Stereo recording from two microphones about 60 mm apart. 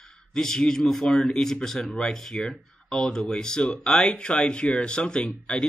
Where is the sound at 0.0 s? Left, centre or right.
Centre.